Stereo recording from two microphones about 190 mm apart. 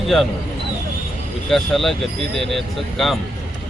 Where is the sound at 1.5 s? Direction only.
Centre (ahead or behind).